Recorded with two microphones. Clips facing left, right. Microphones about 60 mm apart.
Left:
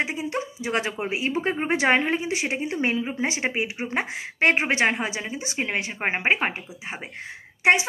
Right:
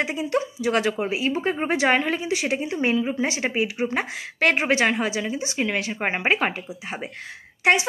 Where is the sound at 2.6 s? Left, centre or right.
Left.